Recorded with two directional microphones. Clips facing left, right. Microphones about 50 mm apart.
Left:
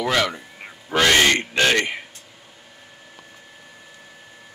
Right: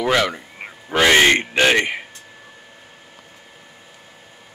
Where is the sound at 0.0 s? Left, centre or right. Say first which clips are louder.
Right 3 dB; centre.